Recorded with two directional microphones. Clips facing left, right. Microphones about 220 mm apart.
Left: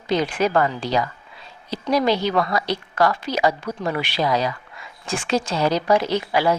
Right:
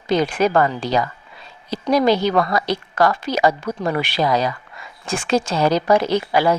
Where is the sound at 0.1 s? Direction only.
45° right (ahead or behind).